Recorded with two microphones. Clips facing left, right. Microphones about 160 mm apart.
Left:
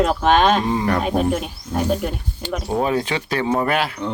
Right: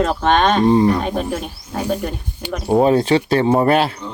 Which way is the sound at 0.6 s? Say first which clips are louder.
Right 8 dB; 30° right (ahead or behind).